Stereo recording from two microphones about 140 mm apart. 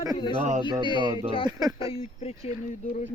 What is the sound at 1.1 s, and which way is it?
Speech, 30° right (ahead or behind).